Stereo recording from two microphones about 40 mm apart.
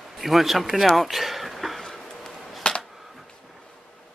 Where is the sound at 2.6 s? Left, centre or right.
Left.